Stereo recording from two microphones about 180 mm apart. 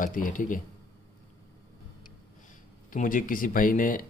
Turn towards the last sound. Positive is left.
turn(degrees=50)  # may be behind; listen again after turning